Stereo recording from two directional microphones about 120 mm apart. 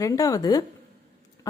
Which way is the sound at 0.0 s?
30° left (ahead or behind).